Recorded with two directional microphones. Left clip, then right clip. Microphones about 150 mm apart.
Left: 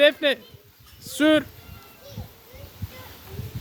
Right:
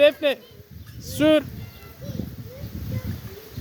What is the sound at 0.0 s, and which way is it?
Speech, 20° left (ahead or behind).